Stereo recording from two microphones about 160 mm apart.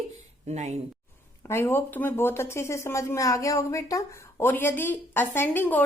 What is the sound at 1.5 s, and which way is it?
Speech, 15° left (ahead or behind).